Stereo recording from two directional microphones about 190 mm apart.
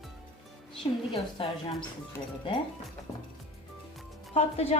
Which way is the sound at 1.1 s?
30° left (ahead or behind).